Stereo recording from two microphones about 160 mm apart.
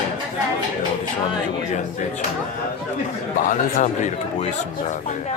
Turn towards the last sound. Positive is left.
turn(degrees=50)  # may be behind; listen again after turning